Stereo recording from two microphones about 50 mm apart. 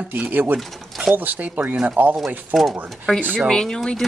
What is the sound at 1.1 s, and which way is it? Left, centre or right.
Speech, right.